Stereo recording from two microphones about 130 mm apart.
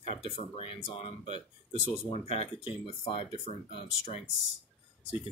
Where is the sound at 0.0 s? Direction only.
45° left (ahead or behind).